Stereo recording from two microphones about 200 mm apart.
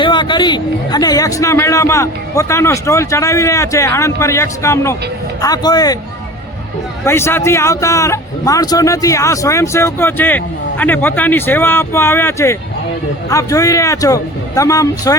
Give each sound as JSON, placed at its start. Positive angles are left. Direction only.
{"t": 0.0, "sound": "a man's voice", "side_deg": 25}
{"t": 7.0, "sound": "a man's voice", "side_deg": 10}